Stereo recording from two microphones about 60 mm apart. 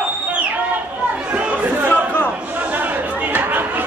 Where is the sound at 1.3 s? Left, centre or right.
Right.